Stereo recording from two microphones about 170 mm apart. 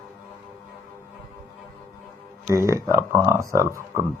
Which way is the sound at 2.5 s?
20° right (ahead or behind).